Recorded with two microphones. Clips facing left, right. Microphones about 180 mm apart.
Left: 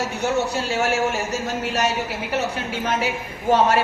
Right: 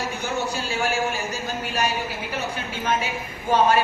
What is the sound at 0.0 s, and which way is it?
A man's voice, 70° left (ahead or behind).